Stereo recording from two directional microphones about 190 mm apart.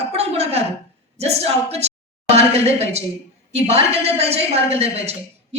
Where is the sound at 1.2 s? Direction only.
35° right (ahead or behind).